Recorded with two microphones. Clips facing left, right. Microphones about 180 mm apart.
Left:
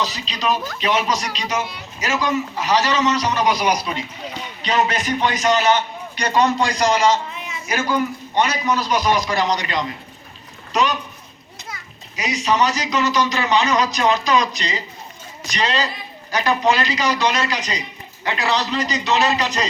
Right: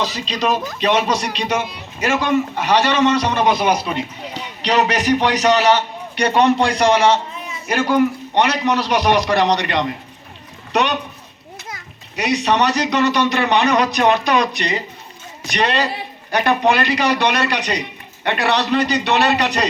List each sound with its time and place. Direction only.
1.4 s a man's voice: 60° right (ahead or behind); by 5.7 s 80° right
6.1 s a man's voice: 60° right (ahead or behind)